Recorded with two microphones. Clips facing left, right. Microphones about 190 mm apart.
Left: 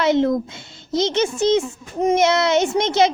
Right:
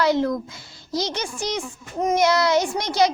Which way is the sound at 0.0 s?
25° left (ahead or behind).